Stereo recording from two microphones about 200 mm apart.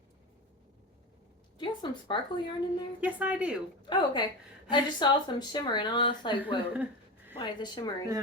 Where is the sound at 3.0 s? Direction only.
5° right (ahead or behind).